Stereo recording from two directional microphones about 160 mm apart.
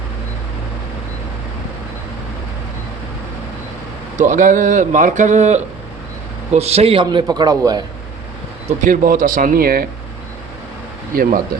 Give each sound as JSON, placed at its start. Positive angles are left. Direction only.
{"t": 4.2, "sound": "a man's voice", "side_deg": -50}
{"t": 8.8, "sound": "speech", "side_deg": -55}
{"t": 11.1, "sound": "speech", "side_deg": -65}